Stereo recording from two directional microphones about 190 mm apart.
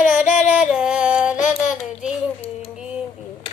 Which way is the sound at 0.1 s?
40° left (ahead or behind).